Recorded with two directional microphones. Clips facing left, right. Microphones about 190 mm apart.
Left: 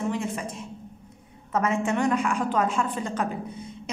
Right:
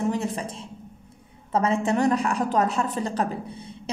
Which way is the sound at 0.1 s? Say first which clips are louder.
Right 2 dB; 35° right (ahead or behind).